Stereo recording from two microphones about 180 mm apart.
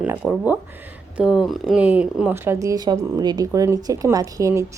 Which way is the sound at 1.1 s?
5° right (ahead or behind).